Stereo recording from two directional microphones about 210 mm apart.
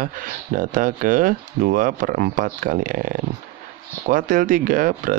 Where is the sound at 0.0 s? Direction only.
40° right (ahead or behind).